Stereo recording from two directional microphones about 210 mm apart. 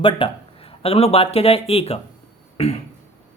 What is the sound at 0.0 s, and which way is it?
Speech, 25° left (ahead or behind).